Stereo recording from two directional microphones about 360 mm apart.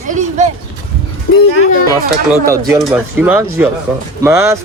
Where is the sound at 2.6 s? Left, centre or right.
Centre.